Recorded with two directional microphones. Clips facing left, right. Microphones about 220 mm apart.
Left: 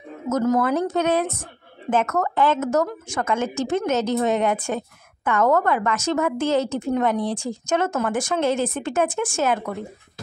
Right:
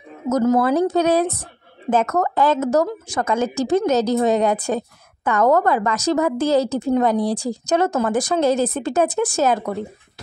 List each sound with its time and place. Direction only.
0.3 s a woman's voice: 35° right (ahead or behind)